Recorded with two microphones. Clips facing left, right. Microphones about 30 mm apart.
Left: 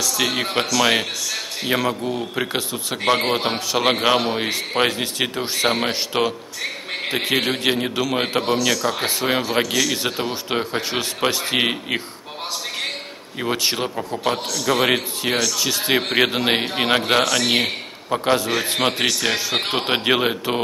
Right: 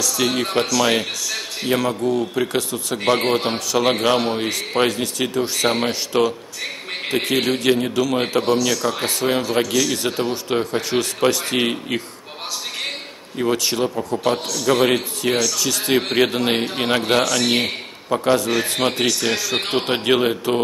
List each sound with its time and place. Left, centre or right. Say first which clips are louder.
0.0 s a man's voice: right 1 dB; centre
8.3 s a man's voice: right 1 dB; left
13.4 s a man's voice: right 2 dB; left
14.3 s a man's voice: right 2 dB; centre